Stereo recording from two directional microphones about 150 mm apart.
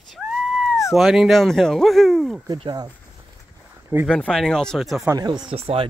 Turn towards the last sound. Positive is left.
turn(degrees=-40)  # may be behind; listen again after turning